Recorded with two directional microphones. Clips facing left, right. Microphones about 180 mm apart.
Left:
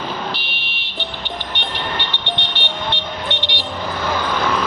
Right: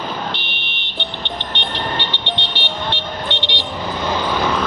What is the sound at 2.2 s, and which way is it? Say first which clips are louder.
Music: even; 15° left (ahead or behind).